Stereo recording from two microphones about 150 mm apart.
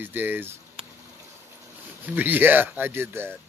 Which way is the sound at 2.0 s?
10° right (ahead or behind).